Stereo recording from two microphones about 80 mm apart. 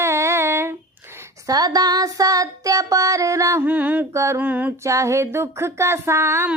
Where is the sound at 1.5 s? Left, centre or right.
Right.